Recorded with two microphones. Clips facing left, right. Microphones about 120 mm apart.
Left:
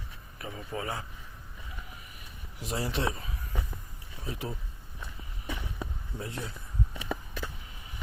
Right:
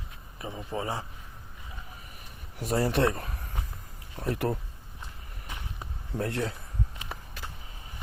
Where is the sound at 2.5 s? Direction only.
50° right (ahead or behind).